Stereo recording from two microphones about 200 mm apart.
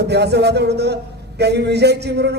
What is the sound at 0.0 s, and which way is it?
A man's voice, 55° right (ahead or behind).